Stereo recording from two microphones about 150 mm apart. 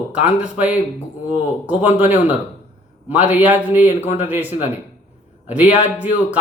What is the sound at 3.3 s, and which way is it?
Speech, 10° right (ahead or behind).